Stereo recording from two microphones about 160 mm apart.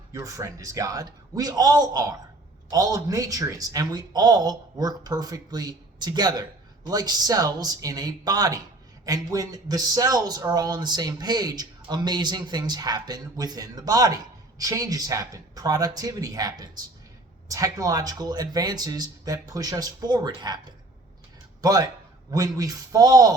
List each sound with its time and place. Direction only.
0.1 s speech: 20° right (ahead or behind)